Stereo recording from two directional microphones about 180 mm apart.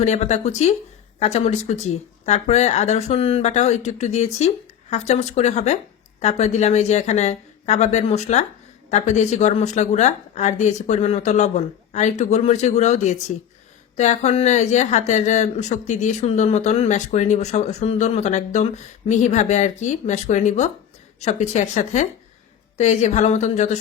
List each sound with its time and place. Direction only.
0.0 s speech: 40° left (ahead or behind)